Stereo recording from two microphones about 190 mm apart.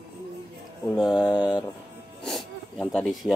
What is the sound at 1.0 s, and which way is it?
Mantra, 20° left (ahead or behind).